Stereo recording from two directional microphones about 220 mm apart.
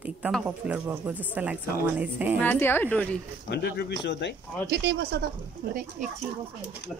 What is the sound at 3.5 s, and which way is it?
Speech, 50° left (ahead or behind).